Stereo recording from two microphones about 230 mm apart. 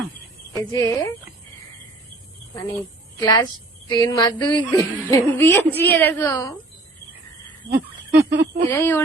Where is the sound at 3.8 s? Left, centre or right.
Centre.